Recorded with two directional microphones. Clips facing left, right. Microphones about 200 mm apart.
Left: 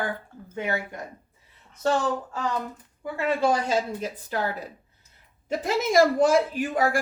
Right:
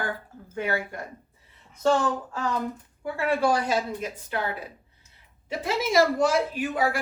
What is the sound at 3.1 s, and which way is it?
Speech, 20° left (ahead or behind).